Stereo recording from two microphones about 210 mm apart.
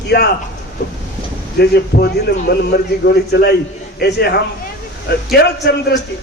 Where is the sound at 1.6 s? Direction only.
50° left (ahead or behind).